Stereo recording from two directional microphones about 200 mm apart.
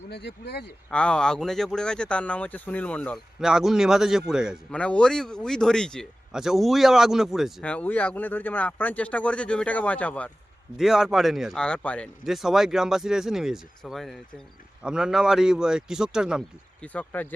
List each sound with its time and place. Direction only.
0.1 s speech: 55° left (ahead or behind)
0.9 s speech: 5° left (ahead or behind)
16.8 s speech: 5° left (ahead or behind)